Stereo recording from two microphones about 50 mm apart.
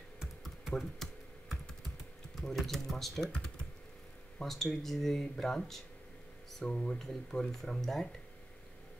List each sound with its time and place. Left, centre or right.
0.4 s computer keyboard: centre
2.3 s speech: centre
4.4 s speech: centre
6.6 s speech: centre
7.0 s speech: centre